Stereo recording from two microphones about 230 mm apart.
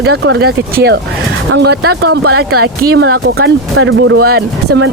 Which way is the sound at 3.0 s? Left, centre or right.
Right.